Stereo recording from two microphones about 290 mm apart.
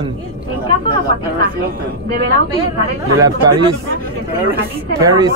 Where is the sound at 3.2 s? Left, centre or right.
Centre.